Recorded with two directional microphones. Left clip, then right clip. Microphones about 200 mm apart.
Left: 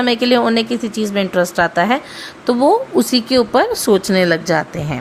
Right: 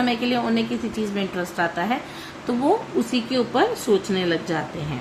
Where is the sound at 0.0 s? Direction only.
50° left (ahead or behind).